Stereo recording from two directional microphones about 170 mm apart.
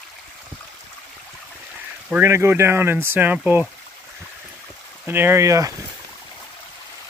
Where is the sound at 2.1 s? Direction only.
15° right (ahead or behind).